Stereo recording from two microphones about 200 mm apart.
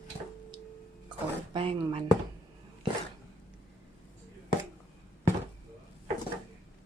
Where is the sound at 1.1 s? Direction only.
25° right (ahead or behind).